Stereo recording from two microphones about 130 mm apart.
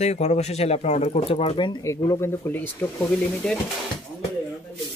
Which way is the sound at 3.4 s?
5° left (ahead or behind).